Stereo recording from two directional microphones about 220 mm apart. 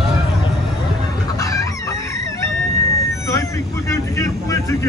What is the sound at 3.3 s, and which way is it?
Vehicle, 15° left (ahead or behind).